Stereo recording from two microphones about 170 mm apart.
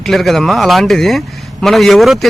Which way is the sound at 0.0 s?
Centre (ahead or behind).